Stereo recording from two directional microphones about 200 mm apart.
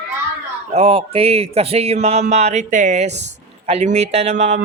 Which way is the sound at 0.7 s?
30° right (ahead or behind).